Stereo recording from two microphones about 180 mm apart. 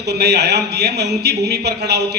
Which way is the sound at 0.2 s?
65° right (ahead or behind).